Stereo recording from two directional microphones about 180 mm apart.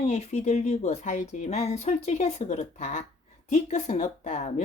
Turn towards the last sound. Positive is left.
turn(degrees=40)  # may be behind; listen again after turning